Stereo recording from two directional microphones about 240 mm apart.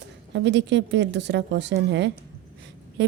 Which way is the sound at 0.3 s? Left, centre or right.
Right.